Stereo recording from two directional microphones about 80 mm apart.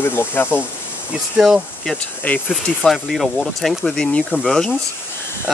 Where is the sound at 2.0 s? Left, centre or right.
Centre.